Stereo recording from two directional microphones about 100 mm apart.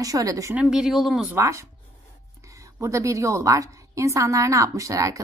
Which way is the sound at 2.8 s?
30° right (ahead or behind).